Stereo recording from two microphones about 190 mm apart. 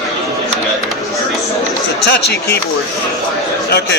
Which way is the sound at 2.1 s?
60° left (ahead or behind).